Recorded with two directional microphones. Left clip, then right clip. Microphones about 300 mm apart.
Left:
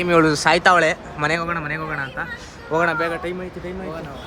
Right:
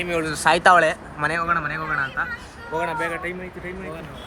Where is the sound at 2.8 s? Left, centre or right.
Left.